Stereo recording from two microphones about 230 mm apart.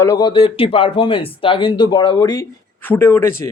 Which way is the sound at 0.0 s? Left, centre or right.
Centre.